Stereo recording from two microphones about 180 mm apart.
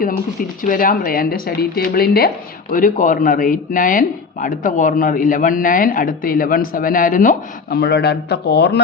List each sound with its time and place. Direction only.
0.6 s speech: 50° left (ahead or behind); by 8.8 s 65° left (ahead or behind)